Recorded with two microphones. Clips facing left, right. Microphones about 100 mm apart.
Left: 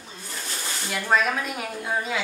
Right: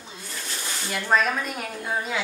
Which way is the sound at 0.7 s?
Centre (ahead or behind).